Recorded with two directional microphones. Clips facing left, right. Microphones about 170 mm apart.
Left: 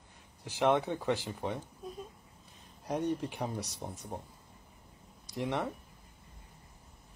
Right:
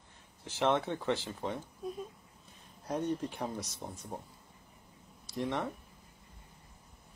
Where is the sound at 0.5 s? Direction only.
15° left (ahead or behind).